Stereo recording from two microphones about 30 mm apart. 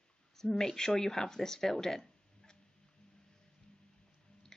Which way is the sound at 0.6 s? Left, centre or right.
Centre.